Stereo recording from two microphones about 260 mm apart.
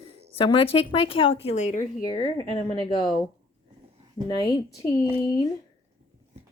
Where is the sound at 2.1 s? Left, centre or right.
Right.